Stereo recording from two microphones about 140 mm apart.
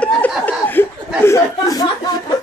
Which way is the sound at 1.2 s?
25° left (ahead or behind).